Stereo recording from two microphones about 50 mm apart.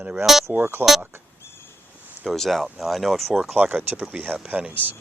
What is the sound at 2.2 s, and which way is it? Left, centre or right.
Speech, centre.